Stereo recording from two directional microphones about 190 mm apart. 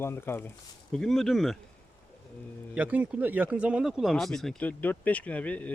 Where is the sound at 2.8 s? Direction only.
10° right (ahead or behind).